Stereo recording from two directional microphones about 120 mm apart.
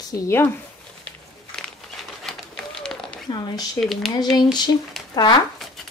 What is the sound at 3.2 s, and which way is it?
Speech, 35° left (ahead or behind).